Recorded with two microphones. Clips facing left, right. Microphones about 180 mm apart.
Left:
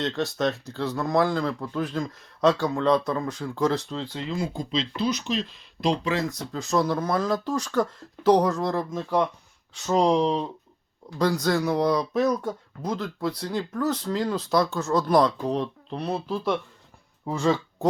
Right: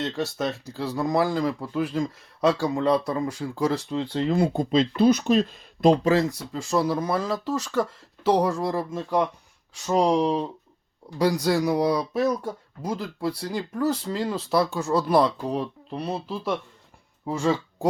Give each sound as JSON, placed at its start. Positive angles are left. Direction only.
{"t": 0.0, "sound": "speech", "side_deg": -10}
{"t": 4.0, "sound": "speech", "side_deg": -30}
{"t": 4.3, "sound": "speech", "side_deg": -60}
{"t": 6.5, "sound": "speech", "side_deg": -5}